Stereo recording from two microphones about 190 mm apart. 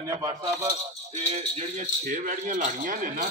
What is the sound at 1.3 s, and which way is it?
A man's voice, 35° right (ahead or behind).